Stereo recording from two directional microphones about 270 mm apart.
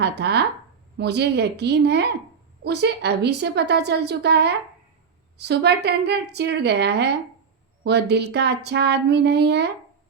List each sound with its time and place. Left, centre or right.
0.0 s a woman's voice: right